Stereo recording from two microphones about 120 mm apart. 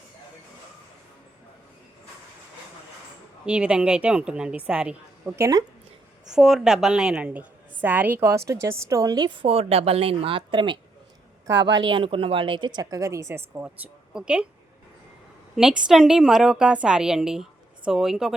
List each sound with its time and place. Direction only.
3.4 s a woman's voice: 10° right (ahead or behind)
5.4 s speech: 30° right (ahead or behind)
6.2 s a woman's voice: 5° right (ahead or behind)
15.5 s a woman's voice: 5° right (ahead or behind)